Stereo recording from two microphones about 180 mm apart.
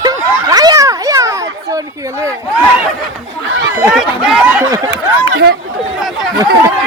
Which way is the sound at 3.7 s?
5° right (ahead or behind).